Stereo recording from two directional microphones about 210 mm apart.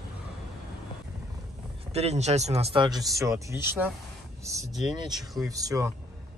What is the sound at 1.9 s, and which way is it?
Speech, 30° right (ahead or behind).